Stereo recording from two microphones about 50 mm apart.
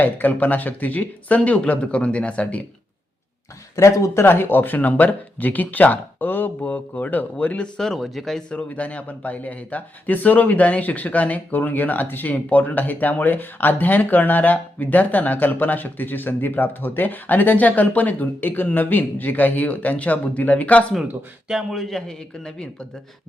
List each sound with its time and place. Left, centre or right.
0.0 s speech: left
3.8 s speech: left
7.9 s speech: centre
8.4 s speech: left
21.4 s a man's voice: centre
21.8 s speech: centre